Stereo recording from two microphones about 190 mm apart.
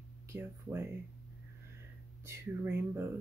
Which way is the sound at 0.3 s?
10° right (ahead or behind).